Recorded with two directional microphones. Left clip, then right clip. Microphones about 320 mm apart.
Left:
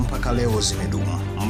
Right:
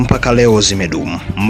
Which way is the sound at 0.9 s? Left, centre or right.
Left.